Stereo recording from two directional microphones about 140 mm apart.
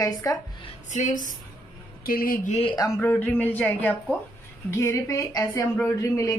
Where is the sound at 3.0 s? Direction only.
15° left (ahead or behind).